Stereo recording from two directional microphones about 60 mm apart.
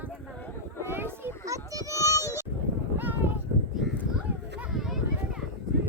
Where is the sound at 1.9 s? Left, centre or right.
Left.